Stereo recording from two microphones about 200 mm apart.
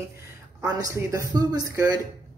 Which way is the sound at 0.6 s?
15° right (ahead or behind).